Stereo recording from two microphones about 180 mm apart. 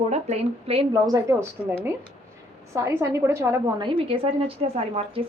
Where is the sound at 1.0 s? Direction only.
20° right (ahead or behind).